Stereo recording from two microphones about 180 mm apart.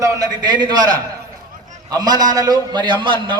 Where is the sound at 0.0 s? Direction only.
20° right (ahead or behind).